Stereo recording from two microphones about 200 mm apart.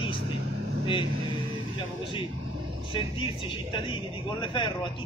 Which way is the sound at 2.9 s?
25° left (ahead or behind).